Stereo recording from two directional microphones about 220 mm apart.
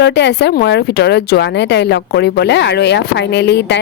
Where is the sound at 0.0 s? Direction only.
50° left (ahead or behind).